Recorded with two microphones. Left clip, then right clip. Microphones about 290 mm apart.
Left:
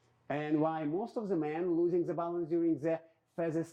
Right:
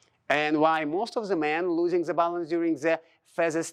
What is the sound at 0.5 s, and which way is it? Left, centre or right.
Speech, centre.